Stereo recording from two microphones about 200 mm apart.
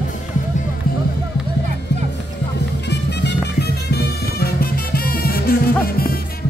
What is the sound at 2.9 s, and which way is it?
Music, 55° left (ahead or behind).